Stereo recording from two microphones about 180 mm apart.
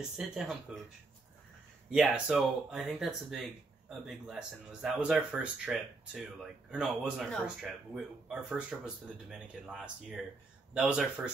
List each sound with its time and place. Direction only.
0.2 s speech: centre (ahead or behind)
1.9 s speech: 5° right (ahead or behind)